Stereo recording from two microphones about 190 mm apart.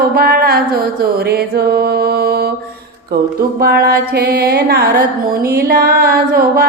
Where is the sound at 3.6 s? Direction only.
55° right (ahead or behind).